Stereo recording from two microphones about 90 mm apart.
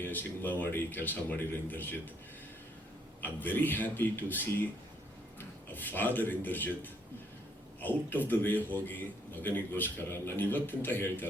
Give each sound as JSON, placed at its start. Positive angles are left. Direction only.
{"t": 0.0, "sound": "a man's voice", "side_deg": 20}
{"t": 3.2, "sound": "a man's voice", "side_deg": 20}